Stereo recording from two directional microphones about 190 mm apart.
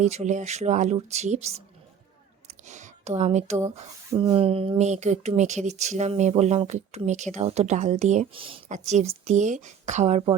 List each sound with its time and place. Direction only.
0.0 s speech: 40° right (ahead or behind)
4.1 s speech: 20° right (ahead or behind)